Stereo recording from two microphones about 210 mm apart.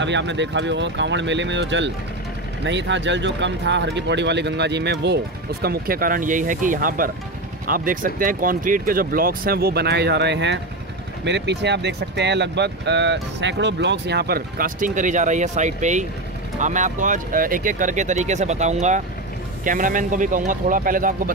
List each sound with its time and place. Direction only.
0.0 s speech: 60° right (ahead or behind); by 21.1 s 40° right (ahead or behind)